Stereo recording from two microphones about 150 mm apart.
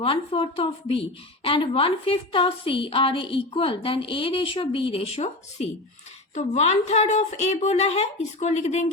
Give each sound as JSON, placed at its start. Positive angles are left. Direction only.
{"t": 0.0, "sound": "a woman's voice", "side_deg": 35}